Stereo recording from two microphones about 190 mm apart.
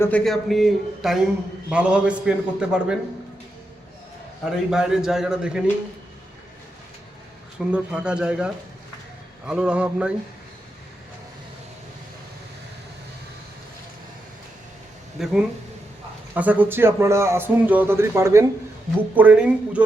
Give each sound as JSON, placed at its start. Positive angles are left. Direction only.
{"t": 0.0, "sound": "a man's voice", "side_deg": 5}
{"t": 4.4, "sound": "a man's voice", "side_deg": -5}
{"t": 7.7, "sound": "a man's voice", "side_deg": -5}
{"t": 15.2, "sound": "a man's voice", "side_deg": 0}